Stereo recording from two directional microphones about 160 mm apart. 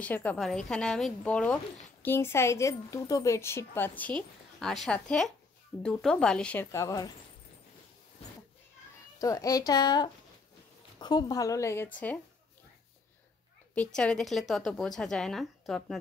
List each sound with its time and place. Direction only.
0.0 s a woman's voice: 10° left (ahead or behind)
8.2 s a sound: 40° left (ahead or behind)
9.2 s a woman's voice: 20° left (ahead or behind)
13.7 s a woman's voice: 5° left (ahead or behind)